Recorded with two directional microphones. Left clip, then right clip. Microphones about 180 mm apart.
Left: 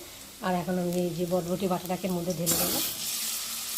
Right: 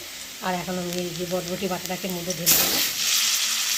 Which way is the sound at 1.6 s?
Centre (ahead or behind).